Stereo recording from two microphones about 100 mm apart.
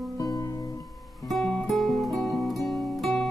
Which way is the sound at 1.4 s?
10° left (ahead or behind).